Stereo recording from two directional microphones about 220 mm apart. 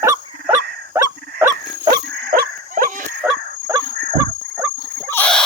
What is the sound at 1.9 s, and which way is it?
Dog, 45° right (ahead or behind).